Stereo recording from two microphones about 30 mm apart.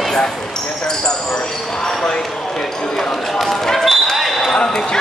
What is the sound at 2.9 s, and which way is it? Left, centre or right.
Speech, centre.